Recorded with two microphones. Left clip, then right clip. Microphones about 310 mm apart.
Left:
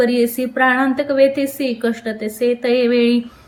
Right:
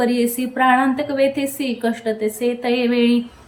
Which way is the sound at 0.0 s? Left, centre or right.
Centre.